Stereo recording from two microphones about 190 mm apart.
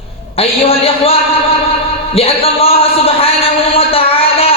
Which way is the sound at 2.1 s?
30° left (ahead or behind).